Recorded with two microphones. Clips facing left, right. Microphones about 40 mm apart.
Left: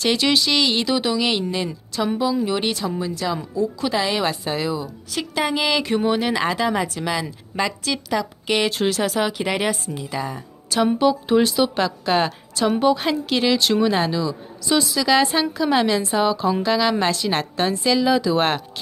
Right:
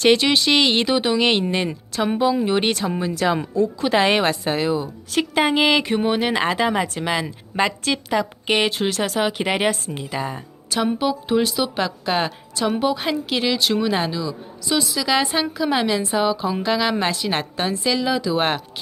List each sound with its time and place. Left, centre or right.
0.2 s speech: right
5.8 s speech: centre
8.7 s a woman's voice: centre
9.4 s speech: right
10.7 s a woman's voice: centre